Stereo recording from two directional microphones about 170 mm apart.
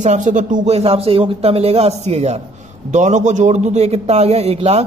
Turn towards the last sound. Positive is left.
turn(degrees=-35)  # may be behind; listen again after turning